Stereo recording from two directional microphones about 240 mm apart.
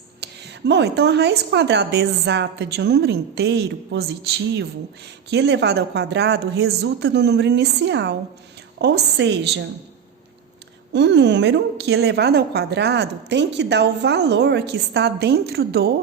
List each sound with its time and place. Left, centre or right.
0.2 s a woman's voice: right
10.9 s a woman's voice: right